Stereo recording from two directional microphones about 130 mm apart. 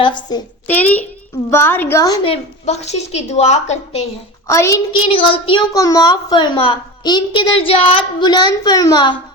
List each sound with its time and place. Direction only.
0.0 s a woman's voice: 35° left (ahead or behind)
0.7 s a child's voice: 10° left (ahead or behind)
2.2 s a woman's voice: 55° left (ahead or behind)
4.4 s a woman's voice: 20° left (ahead or behind)
4.9 s a woman's voice: 40° left (ahead or behind)
5.7 s a woman's voice: 25° left (ahead or behind)